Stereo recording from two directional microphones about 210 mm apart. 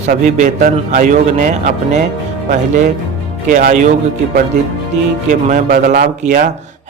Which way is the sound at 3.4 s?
40° right (ahead or behind).